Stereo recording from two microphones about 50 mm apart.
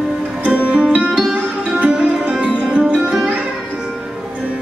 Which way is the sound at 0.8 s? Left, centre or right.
Right.